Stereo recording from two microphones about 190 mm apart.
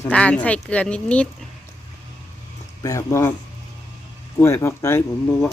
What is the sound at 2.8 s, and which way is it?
Speech, 15° left (ahead or behind).